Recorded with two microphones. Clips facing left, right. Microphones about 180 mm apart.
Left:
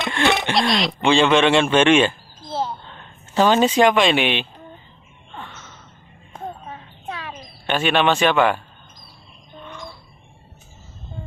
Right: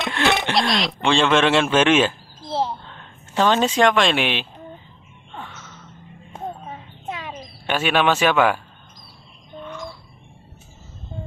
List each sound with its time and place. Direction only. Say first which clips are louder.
0.0 s speech: left 1 dB; centre (ahead or behind)
5.3 s gasp: even; 5° right (ahead or behind)
7.1 s a sound: right 1 dB; 20° right (ahead or behind)
7.6 s speech: left 1 dB; 5° right (ahead or behind)